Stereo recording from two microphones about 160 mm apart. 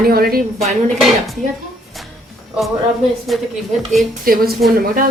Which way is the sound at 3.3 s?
Centre (ahead or behind).